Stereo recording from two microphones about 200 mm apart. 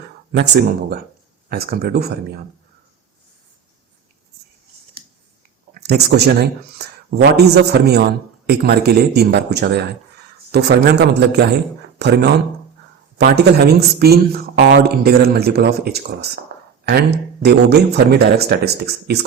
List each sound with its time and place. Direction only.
0.3 s speech: 55° right (ahead or behind)
5.7 s speech: 55° right (ahead or behind)
17.4 s speech: 55° right (ahead or behind)